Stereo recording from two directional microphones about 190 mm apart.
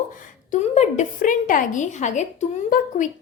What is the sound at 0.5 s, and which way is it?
A woman's voice, 35° left (ahead or behind).